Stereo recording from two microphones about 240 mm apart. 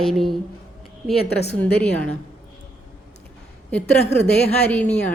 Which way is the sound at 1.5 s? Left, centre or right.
Centre.